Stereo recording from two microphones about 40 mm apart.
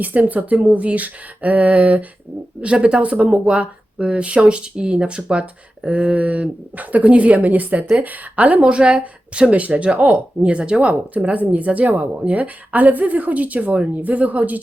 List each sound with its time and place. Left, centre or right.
0.0 s speech: right
2.6 s speech: right
8.6 s speech: right
11.2 s speech: right